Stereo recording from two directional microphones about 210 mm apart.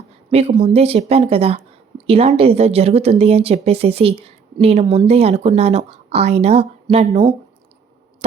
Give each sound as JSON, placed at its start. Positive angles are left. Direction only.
{"t": 0.3, "sound": "a woman's voice", "side_deg": -30}